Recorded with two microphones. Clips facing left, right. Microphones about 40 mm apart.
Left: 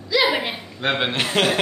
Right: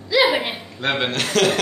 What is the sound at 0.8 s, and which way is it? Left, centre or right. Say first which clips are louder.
Speech: even; centre.